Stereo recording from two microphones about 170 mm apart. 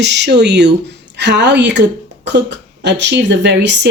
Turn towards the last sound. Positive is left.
turn(degrees=-90)